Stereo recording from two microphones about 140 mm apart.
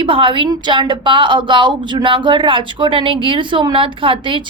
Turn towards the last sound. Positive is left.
turn(degrees=-35)  # may be behind; listen again after turning